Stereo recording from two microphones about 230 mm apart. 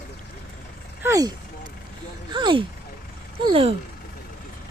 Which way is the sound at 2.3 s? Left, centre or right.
Right.